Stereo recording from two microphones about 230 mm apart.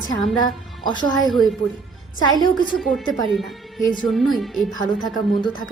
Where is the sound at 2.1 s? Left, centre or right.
Centre.